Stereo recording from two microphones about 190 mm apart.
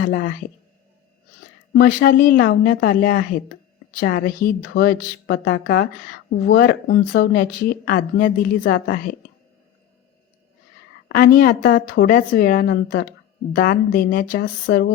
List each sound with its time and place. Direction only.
0.0 s a woman's voice: 70° left (ahead or behind)
1.8 s speech: 50° left (ahead or behind)
11.1 s speech: 50° left (ahead or behind)
12.6 s speech: 60° left (ahead or behind)
14.7 s a sound: 80° left